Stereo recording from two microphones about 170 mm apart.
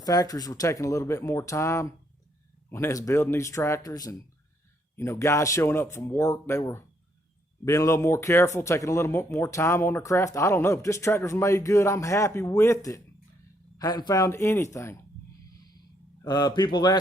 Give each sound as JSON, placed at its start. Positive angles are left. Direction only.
{"t": 0.0, "sound": "speech", "side_deg": 20}
{"t": 16.2, "sound": "speech", "side_deg": 25}